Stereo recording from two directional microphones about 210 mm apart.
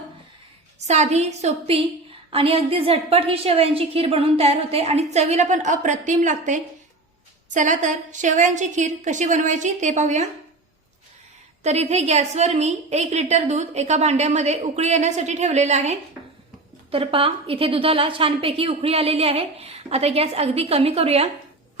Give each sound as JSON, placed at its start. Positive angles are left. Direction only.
{"t": 0.9, "sound": "a woman's voice", "side_deg": -30}
{"t": 11.6, "sound": "a woman's voice", "side_deg": -30}